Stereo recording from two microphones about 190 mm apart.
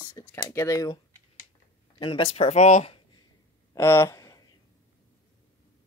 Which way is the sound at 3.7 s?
15° left (ahead or behind).